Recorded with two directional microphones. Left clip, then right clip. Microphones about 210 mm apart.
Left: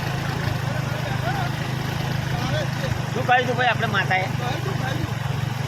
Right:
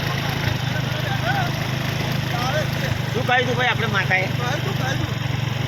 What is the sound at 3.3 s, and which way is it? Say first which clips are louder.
Speech: even; 20° left (ahead or behind).